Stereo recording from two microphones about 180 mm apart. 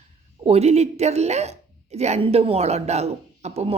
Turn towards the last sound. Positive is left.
turn(degrees=-35)  # may be behind; listen again after turning